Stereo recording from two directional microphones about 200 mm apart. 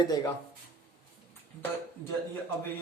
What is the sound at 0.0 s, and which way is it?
Speech, 15° left (ahead or behind).